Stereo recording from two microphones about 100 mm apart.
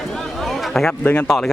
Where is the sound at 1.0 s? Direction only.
15° left (ahead or behind).